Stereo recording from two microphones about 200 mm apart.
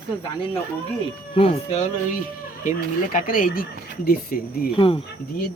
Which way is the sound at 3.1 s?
45° left (ahead or behind).